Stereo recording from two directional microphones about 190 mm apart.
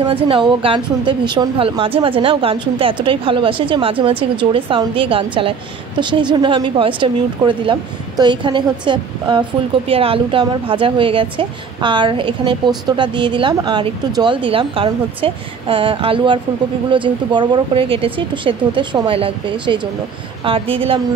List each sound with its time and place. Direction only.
0.0 s a woman's voice: 30° right (ahead or behind)